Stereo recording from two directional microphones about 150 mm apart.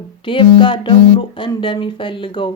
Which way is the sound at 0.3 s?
35° left (ahead or behind).